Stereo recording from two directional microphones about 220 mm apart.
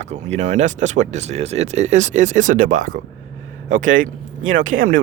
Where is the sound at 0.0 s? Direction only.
30° right (ahead or behind).